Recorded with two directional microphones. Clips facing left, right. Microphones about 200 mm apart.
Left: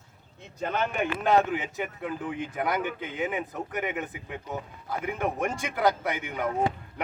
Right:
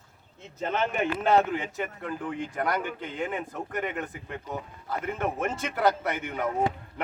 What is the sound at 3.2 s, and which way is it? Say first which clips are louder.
Speech: left 1 dB; 15° left (ahead or behind).